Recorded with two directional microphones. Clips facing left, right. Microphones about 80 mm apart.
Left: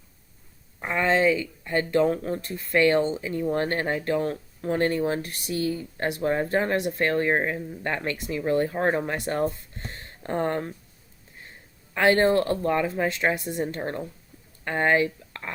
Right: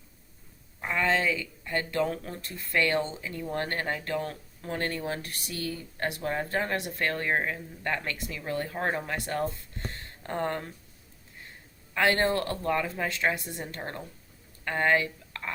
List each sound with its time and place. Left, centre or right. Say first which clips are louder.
0.8 s speech: left 4 dB; left
11.9 s speech: left 5 dB; left